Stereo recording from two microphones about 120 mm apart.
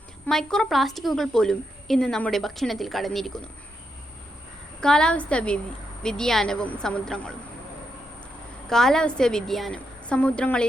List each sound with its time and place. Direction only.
0.3 s a woman's voice: 5° left (ahead or behind)
4.8 s a woman's voice: 5° left (ahead or behind)
8.7 s a woman's voice: 5° left (ahead or behind)